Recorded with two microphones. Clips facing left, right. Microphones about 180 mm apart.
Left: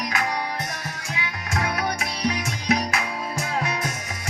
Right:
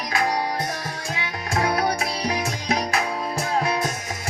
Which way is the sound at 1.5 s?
30° right (ahead or behind).